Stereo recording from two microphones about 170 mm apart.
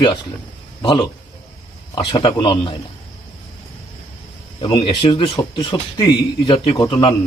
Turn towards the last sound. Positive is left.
turn(degrees=30)  # may be behind; listen again after turning